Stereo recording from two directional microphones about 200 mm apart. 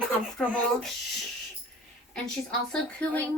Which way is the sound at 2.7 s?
5° left (ahead or behind).